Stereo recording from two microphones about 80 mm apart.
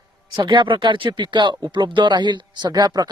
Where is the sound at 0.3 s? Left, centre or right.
Right.